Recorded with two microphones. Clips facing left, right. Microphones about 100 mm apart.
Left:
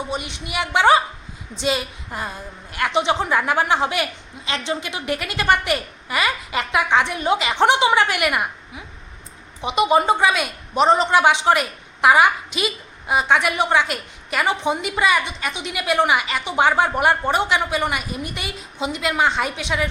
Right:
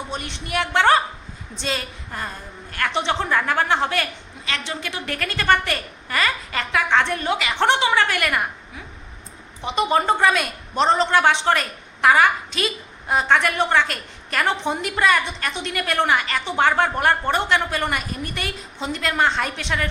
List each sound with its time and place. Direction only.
0.1 s a woman's voice: 5° left (ahead or behind)
7.3 s a woman's voice: 20° left (ahead or behind)